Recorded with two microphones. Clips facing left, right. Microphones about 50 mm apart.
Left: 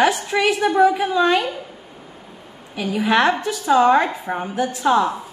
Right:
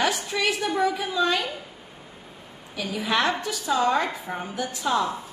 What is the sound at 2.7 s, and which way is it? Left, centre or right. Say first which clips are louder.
Speech: left 7 dB; left.